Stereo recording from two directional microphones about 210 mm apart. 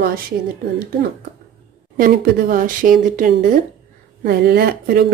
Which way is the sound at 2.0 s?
45° right (ahead or behind).